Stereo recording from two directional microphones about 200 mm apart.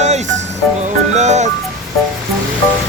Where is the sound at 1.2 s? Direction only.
35° right (ahead or behind).